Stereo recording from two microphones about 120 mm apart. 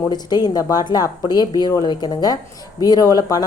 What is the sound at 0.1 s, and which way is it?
Speech, 35° left (ahead or behind).